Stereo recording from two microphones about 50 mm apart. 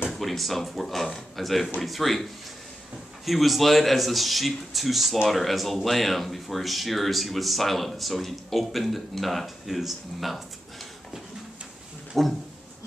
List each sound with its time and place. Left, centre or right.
0.1 s a man's voice: centre
3.3 s a man's voice: centre
12.1 s a man's voice: centre